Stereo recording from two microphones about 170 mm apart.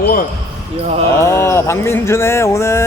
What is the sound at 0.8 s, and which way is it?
Speech, 35° right (ahead or behind).